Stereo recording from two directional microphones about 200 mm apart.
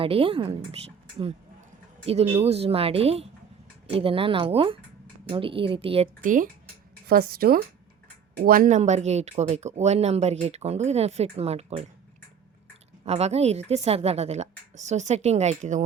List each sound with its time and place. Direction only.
0.0 s a woman's voice: 25° right (ahead or behind)
6.2 s speech: 40° right (ahead or behind)
13.1 s speech: 30° right (ahead or behind)